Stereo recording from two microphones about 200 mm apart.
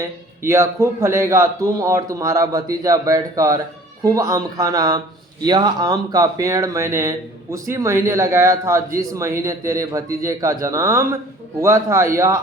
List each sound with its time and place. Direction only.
0.0 s a man's voice: 15° right (ahead or behind)